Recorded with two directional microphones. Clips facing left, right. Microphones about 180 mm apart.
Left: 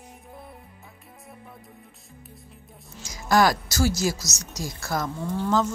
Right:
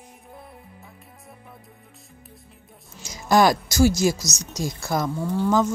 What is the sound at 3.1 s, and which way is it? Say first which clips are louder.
Speech: right 3 dB; 20° right (ahead or behind).